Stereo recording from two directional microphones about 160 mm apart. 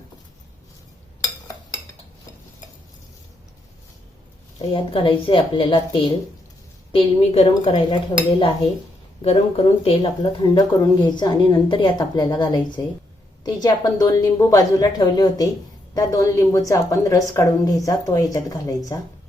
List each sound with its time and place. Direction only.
4.7 s speech: 35° left (ahead or behind)